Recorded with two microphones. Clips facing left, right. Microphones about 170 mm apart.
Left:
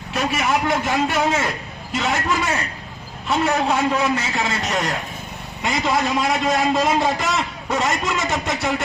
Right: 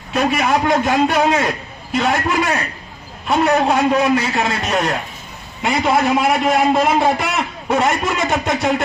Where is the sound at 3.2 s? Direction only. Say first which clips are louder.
Right 4 dB; 60° right (ahead or behind).